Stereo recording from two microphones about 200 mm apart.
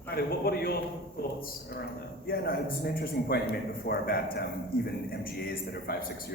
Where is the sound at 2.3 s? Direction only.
45° left (ahead or behind).